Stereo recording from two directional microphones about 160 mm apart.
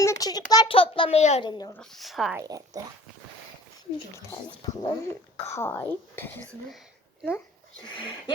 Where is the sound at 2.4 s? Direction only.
20° right (ahead or behind).